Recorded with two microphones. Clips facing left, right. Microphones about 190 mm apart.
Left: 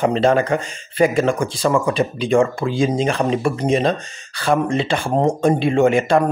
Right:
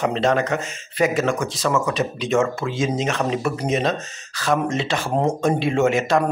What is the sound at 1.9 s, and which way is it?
Speech, centre (ahead or behind).